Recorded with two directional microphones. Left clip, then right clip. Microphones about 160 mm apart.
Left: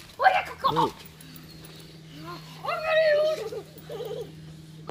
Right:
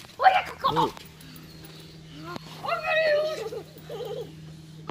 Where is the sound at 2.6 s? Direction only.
5° right (ahead or behind).